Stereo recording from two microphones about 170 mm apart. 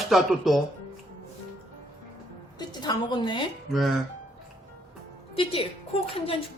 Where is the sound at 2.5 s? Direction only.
25° left (ahead or behind).